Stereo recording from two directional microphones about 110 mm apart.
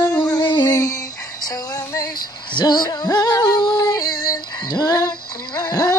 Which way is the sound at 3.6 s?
35° left (ahead or behind).